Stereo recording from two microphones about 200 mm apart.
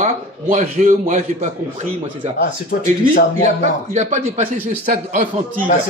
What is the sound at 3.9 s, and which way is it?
Speech, 35° right (ahead or behind).